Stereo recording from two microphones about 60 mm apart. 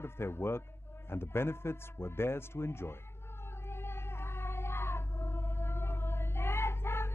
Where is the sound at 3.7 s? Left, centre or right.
Left.